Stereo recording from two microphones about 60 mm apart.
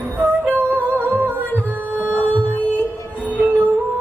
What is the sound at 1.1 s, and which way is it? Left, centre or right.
Music, right.